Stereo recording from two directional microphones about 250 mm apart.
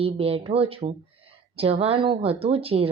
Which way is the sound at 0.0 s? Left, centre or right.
Right.